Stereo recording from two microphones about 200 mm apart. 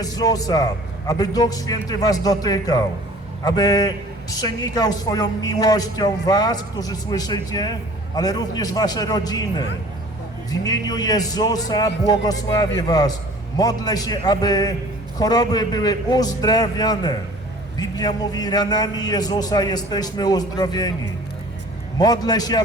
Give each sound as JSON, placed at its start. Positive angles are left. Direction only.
{"t": 0.0, "sound": "a man's voice", "side_deg": 20}
{"t": 21.9, "sound": "a man's voice", "side_deg": 20}